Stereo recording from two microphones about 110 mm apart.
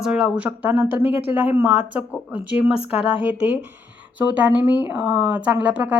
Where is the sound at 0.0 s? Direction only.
5° right (ahead or behind).